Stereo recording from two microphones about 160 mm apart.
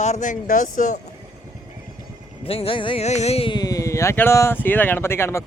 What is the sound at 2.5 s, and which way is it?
Speech, 35° left (ahead or behind).